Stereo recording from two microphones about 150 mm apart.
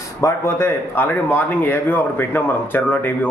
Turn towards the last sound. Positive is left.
turn(degrees=15)  # may be behind; listen again after turning